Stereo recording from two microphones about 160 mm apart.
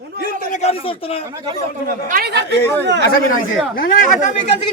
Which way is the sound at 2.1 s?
90° right.